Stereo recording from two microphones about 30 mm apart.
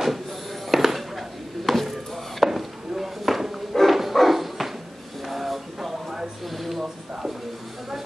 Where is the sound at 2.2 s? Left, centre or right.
Centre.